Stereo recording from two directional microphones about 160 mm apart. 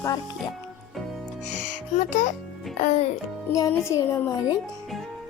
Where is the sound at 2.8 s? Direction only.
45° left (ahead or behind).